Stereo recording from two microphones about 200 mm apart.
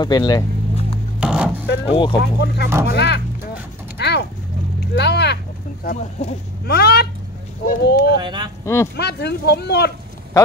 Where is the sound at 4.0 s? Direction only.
55° left (ahead or behind).